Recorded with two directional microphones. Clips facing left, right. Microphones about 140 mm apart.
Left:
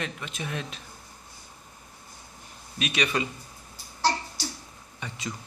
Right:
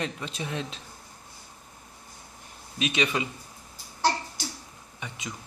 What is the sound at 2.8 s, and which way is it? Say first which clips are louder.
Speech: right 2 dB; 20° right (ahead or behind).